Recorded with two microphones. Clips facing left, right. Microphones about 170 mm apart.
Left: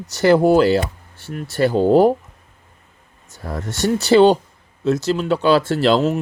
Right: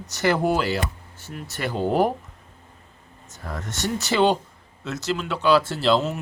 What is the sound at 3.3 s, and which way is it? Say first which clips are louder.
Speech: left 6 dB; 35° left (ahead or behind).